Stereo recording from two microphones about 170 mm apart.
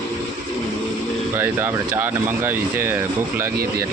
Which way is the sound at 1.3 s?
15° right (ahead or behind).